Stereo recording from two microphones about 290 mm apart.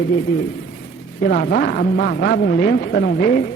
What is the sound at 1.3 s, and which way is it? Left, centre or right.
A man's voice, left.